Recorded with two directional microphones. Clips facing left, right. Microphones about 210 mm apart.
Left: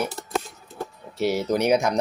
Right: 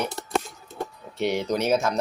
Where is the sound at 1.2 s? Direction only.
5° left (ahead or behind).